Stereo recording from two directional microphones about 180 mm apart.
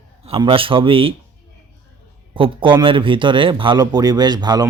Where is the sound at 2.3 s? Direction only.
30° right (ahead or behind).